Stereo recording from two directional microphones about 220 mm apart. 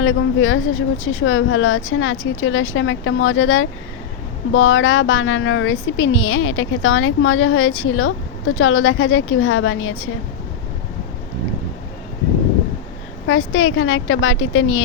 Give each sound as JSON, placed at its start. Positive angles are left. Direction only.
{"t": 0.0, "sound": "speech", "side_deg": 65}
{"t": 13.2, "sound": "speech", "side_deg": 65}